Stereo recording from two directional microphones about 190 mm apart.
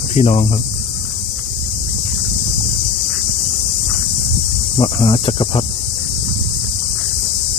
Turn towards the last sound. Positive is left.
turn(degrees=30)  # may be behind; listen again after turning